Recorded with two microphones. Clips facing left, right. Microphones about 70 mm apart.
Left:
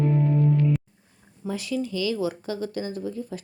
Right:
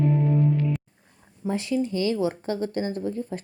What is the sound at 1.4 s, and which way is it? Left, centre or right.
Speech, right.